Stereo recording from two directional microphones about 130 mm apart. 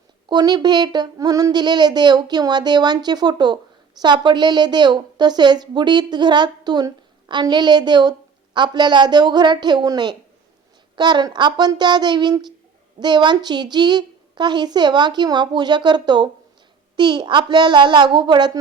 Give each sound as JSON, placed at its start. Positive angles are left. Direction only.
{"t": 0.3, "sound": "a woman's voice", "side_deg": -30}